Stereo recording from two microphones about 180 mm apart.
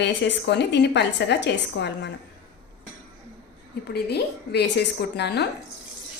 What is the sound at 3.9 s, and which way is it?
A woman's voice, 65° left (ahead or behind).